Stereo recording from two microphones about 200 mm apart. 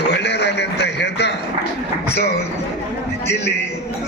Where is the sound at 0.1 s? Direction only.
60° left (ahead or behind).